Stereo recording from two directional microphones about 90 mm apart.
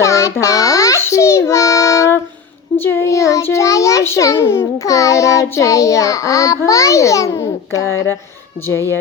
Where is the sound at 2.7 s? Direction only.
25° left (ahead or behind).